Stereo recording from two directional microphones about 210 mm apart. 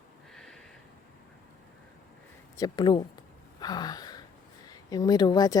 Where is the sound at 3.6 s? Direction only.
20° left (ahead or behind).